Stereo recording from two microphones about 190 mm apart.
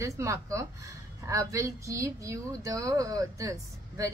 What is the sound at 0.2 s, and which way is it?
Speech, 15° right (ahead or behind).